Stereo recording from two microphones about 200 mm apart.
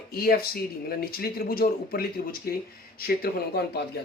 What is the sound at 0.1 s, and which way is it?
Speech, 50° left (ahead or behind).